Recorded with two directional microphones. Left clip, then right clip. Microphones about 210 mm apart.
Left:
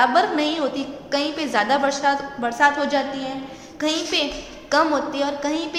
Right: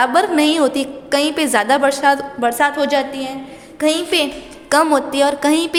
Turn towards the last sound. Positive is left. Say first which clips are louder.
# right 9 dB
turn(degrees=-55)  # may be behind; listen again after turning